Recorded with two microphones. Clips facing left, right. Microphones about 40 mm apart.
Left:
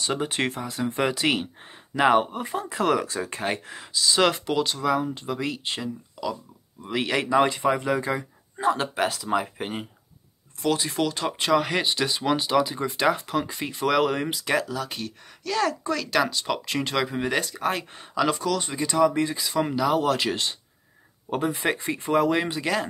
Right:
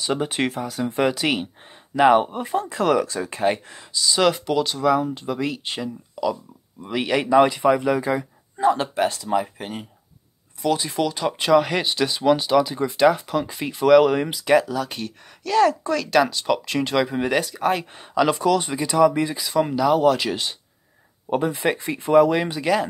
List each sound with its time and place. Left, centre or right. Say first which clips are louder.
0.0 s speech: right 3 dB; centre
3.7 s speech: right 1 dB; centre
9.3 s speech: right 2 dB; centre
10.7 s speech: right 2 dB; centre
18.3 s speech: right 6 dB; right; by 22.8 s centre